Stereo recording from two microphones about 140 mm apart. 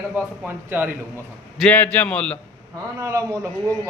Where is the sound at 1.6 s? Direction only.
10° left (ahead or behind).